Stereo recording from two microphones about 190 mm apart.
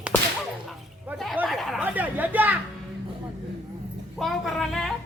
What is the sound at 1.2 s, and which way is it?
Speech, centre (ahead or behind).